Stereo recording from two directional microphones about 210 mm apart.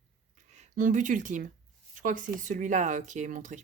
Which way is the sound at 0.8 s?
40° right (ahead or behind).